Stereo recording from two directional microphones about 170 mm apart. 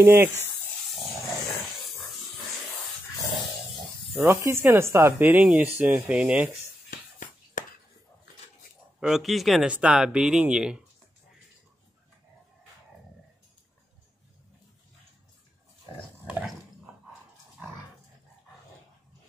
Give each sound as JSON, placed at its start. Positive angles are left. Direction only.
{"t": 0.0, "sound": "speech", "side_deg": -15}
{"t": 4.2, "sound": "speech", "side_deg": -15}
{"t": 6.9, "sound": "music", "side_deg": 50}
{"t": 9.0, "sound": "speech", "side_deg": 0}
{"t": 16.3, "sound": "dog", "side_deg": -5}